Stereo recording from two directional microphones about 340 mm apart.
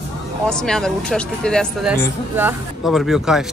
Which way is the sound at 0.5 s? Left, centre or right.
Centre.